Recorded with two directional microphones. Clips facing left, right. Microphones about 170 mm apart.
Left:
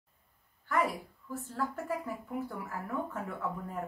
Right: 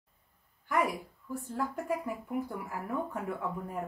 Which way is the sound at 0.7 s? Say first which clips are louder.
Right 1 dB; 15° right (ahead or behind).